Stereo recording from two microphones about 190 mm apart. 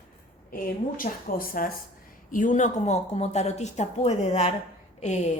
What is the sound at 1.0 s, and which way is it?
A woman's voice, 50° left (ahead or behind).